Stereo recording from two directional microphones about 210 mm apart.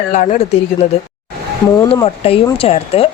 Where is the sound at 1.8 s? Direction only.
20° left (ahead or behind).